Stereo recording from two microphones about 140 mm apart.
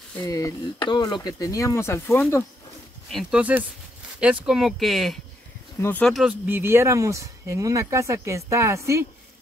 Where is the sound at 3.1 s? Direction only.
Centre (ahead or behind).